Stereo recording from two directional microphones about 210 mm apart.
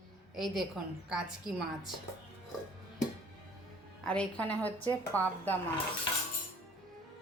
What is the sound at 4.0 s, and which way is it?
A woman's voice, 5° left (ahead or behind).